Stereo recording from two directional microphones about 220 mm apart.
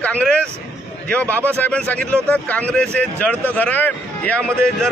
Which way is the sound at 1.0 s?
10° left (ahead or behind).